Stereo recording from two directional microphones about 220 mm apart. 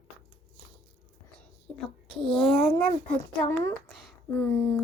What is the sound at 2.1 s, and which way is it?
A child's voice, centre (ahead or behind).